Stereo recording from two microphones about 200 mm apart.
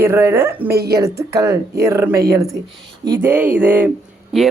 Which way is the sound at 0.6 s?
50° right (ahead or behind).